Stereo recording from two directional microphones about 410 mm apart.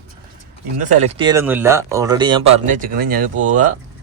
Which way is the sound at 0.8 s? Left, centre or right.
Centre.